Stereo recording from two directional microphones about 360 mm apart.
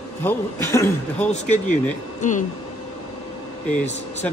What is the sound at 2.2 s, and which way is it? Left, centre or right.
Speech, left.